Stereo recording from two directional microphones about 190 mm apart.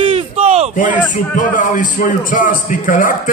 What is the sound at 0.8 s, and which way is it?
A man's voice, 45° left (ahead or behind).